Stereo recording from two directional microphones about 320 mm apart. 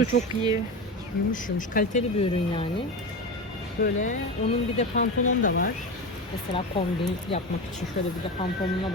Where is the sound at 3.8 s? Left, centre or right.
Left.